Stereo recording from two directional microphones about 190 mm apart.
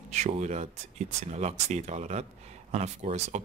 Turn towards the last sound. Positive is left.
turn(degrees=-35)  # may be behind; listen again after turning